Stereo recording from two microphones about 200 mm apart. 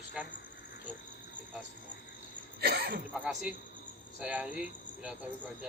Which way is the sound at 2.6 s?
50° right (ahead or behind).